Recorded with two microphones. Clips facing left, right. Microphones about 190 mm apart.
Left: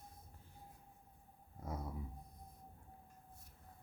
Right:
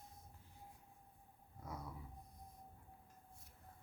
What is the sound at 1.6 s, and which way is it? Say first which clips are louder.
Dog: left 5 dB; 25° left (ahead or behind).